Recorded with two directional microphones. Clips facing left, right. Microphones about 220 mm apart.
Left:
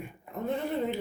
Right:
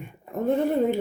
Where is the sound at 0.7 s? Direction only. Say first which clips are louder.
Right 8 dB; 50° right (ahead or behind).